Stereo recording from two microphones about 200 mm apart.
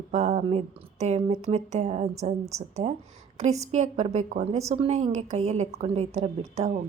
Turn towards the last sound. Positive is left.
turn(degrees=-35)  # may be behind; listen again after turning